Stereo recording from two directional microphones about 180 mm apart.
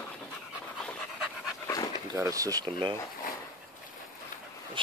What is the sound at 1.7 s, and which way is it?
Dog, 20° left (ahead or behind).